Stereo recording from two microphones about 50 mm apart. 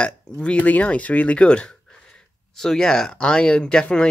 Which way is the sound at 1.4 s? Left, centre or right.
Centre.